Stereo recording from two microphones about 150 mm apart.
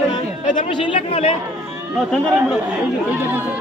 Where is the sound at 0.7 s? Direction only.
35° left (ahead or behind).